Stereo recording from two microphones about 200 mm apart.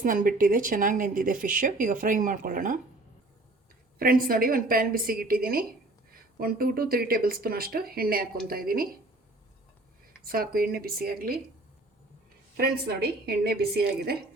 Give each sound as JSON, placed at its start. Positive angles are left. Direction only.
{"t": 0.0, "sound": "speech", "side_deg": -45}
{"t": 3.9, "sound": "speech", "side_deg": -45}
{"t": 10.1, "sound": "speech", "side_deg": -45}
{"t": 12.5, "sound": "speech", "side_deg": -55}